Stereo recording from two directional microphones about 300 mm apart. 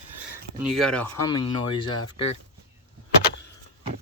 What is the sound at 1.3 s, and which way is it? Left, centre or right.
Speech, centre.